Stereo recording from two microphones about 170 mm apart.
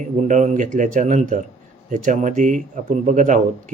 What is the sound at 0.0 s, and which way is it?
Speech, 45° right (ahead or behind).